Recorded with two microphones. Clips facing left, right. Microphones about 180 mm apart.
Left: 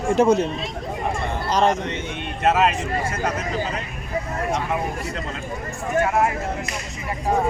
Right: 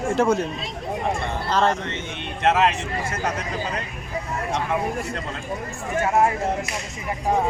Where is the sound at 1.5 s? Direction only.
15° left (ahead or behind).